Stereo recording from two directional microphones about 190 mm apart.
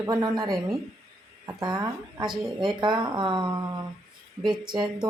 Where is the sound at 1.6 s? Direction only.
20° right (ahead or behind).